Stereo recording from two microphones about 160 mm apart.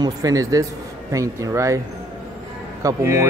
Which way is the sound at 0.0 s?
20° right (ahead or behind).